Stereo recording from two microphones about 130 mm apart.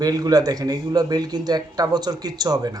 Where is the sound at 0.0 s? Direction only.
30° right (ahead or behind).